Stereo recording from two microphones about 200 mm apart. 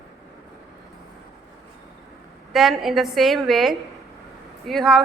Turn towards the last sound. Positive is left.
turn(degrees=0)  # may be behind; listen again after turning